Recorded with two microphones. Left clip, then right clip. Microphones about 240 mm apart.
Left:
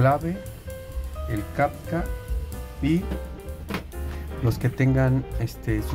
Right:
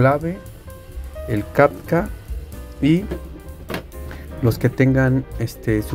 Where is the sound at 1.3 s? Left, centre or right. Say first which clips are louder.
Right 9 dB; right.